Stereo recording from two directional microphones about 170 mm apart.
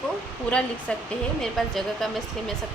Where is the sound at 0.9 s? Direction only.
5° left (ahead or behind).